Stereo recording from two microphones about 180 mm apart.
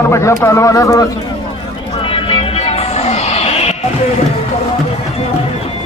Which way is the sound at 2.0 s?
30° left (ahead or behind).